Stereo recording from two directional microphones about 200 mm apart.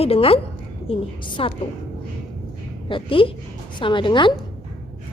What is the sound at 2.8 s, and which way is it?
A woman's voice, 25° left (ahead or behind).